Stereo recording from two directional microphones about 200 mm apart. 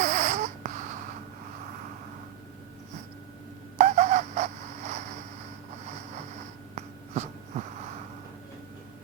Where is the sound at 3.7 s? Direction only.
35° right (ahead or behind).